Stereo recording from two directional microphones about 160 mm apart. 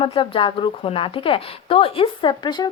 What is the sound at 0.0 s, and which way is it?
A woman's voice, 30° left (ahead or behind).